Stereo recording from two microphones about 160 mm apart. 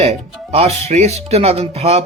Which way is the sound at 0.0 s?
40° right (ahead or behind).